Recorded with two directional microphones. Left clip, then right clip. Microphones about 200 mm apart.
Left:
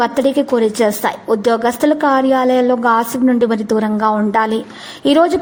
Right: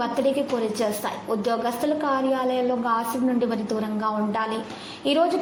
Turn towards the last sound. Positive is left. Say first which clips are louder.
# left 10 dB
turn(degrees=50)  # may be behind; listen again after turning